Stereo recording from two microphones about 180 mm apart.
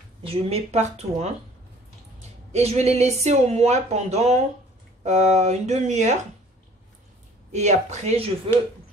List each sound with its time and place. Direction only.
0.2 s speech: 35° right (ahead or behind)
2.5 s speech: 35° right (ahead or behind)
7.5 s speech: 40° right (ahead or behind)